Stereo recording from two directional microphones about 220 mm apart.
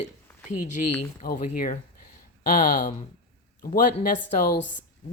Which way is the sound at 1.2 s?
40° left (ahead or behind).